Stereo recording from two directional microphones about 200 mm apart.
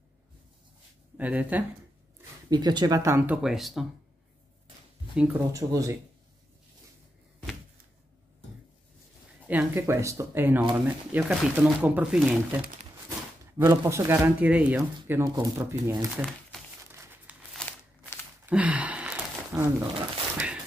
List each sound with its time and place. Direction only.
1.1 s speech: 5° right (ahead or behind)
2.5 s speech: 20° right (ahead or behind)
3.4 s speech: centre (ahead or behind)
5.1 s speech: 5° right (ahead or behind)
5.5 s speech: 15° right (ahead or behind)
9.5 s speech: 10° right (ahead or behind)
13.6 s speech: 15° right (ahead or behind)
17.3 s a sound: 5° right (ahead or behind)